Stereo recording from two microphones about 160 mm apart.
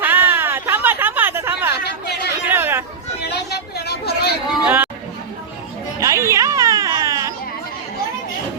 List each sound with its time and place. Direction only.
0.0 s a sound: 15° right (ahead or behind)
1.8 s chatter: 90° left
2.5 s hubbub: 15° right (ahead or behind)
3.2 s a sound: 90° left
4.6 s chatter: 10° right (ahead or behind)
6.0 s music: 20° right (ahead or behind)